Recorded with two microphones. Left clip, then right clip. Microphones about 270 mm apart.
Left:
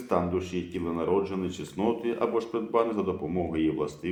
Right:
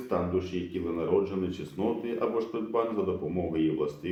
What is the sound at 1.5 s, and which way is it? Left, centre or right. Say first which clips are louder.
Speech: left 2 dB; left.